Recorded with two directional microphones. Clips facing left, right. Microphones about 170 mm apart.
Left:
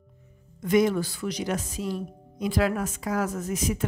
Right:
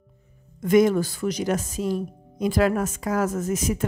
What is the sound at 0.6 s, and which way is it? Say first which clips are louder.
Speech: right 4 dB; 45° right (ahead or behind).